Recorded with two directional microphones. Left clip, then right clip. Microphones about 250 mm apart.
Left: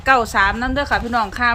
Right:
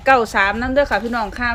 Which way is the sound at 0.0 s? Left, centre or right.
Centre.